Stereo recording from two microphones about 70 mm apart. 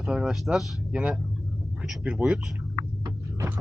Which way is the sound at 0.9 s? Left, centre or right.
Centre.